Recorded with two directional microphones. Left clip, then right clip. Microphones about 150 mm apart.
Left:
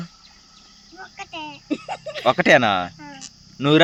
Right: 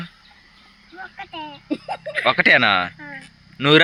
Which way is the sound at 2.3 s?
25° left (ahead or behind).